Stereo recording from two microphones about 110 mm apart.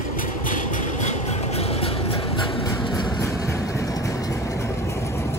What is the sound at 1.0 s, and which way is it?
Vehicle, 90° left.